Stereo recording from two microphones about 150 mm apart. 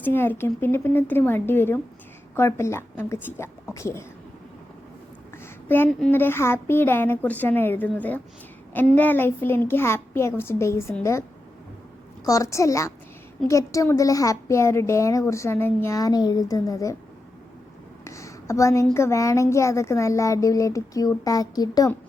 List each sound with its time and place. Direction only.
0.0 s a child's voice: 15° left (ahead or behind)
5.6 s a child's voice: 15° left (ahead or behind)
12.2 s a woman's voice: 20° left (ahead or behind)
18.0 s a sound: 20° left (ahead or behind)
18.9 s a woman's voice: 20° left (ahead or behind)